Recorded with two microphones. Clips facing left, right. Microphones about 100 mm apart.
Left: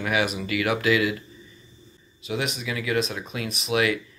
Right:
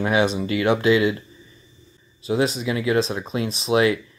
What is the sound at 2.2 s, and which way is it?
Speech, 35° right (ahead or behind).